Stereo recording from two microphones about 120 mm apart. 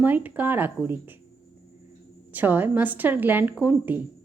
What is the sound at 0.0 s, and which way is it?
A woman's voice, 15° right (ahead or behind).